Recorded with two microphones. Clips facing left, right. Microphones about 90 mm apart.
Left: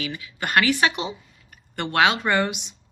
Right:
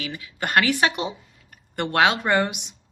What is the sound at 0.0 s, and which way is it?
A woman's voice, 50° right (ahead or behind).